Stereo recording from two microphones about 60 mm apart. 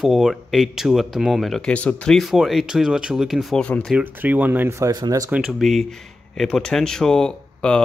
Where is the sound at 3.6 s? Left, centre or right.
Centre.